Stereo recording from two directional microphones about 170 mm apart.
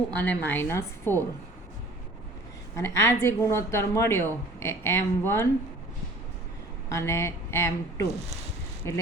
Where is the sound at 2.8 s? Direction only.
15° left (ahead or behind).